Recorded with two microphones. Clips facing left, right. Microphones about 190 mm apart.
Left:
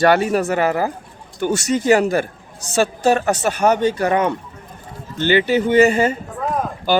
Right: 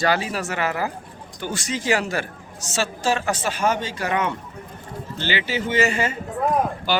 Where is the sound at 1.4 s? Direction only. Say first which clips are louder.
Left 9 dB; 55° left (ahead or behind).